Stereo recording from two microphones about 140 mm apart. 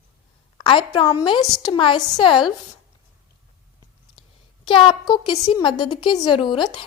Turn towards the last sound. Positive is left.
turn(degrees=35)  # may be behind; listen again after turning